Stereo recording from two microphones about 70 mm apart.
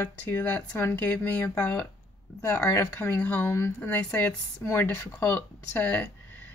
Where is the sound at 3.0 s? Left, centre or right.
Left.